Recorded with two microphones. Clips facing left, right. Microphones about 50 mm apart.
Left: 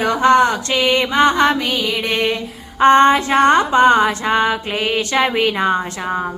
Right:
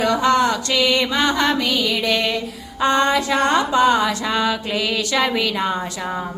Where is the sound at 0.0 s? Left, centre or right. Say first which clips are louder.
Left 4 dB; left.